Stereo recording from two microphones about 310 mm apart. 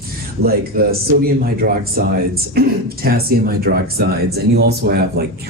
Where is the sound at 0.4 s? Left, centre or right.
Right.